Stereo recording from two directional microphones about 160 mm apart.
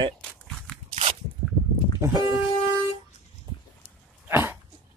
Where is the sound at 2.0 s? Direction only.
20° right (ahead or behind).